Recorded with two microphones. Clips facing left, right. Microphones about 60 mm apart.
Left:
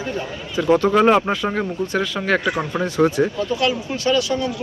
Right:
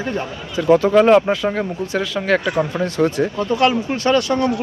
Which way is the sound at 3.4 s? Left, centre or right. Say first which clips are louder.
Right 4 dB; right.